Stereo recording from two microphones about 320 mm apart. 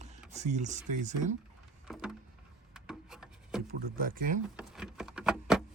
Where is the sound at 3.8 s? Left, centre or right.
Right.